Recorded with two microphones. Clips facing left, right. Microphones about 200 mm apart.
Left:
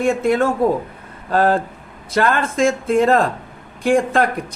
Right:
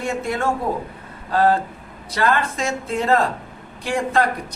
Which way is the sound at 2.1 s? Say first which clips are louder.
Left 3 dB; 50° left (ahead or behind).